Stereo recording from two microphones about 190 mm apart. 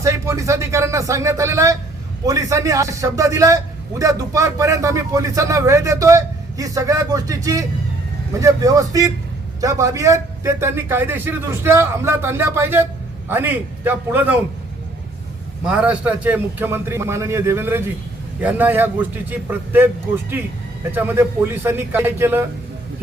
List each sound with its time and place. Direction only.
0.0 s a man's voice: 15° right (ahead or behind)
15.6 s a man's voice: 5° right (ahead or behind)
20.9 s a man's voice: 10° right (ahead or behind)